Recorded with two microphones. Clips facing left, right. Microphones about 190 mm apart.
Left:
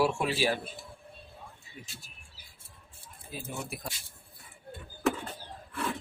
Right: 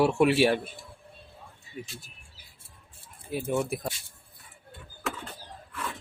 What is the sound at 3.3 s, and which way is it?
Speech, 70° right (ahead or behind).